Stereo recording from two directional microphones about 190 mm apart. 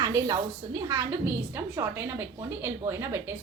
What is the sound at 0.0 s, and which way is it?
A woman's voice, 20° right (ahead or behind).